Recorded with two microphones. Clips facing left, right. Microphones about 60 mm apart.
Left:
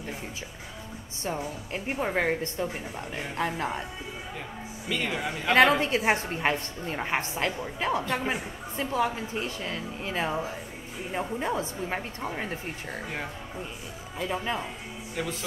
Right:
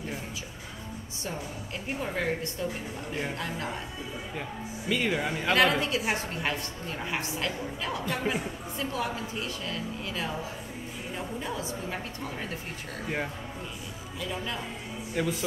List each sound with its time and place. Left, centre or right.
1.2 s a woman's voice: left
4.8 s speech: centre
5.5 s a woman's voice: left
14.2 s a woman's voice: left
15.2 s speech: centre